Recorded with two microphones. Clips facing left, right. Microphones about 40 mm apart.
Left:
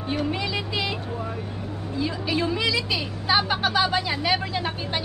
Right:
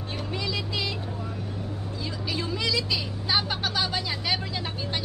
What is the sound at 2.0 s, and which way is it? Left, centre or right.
Vehicle, centre.